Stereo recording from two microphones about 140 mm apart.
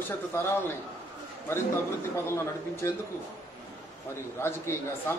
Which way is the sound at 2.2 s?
20° left (ahead or behind).